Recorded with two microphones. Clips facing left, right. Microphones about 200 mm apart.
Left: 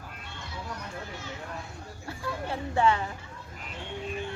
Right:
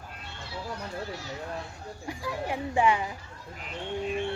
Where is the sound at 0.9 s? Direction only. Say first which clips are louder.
Right 3 dB; 35° right (ahead or behind).